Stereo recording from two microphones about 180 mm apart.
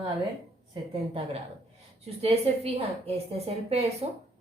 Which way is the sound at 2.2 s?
35° right (ahead or behind).